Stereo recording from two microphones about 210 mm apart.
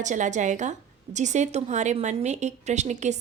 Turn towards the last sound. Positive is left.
turn(degrees=-35)  # may be behind; listen again after turning